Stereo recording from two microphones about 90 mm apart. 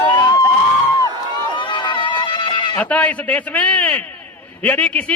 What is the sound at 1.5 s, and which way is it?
Goat, 60° left (ahead or behind).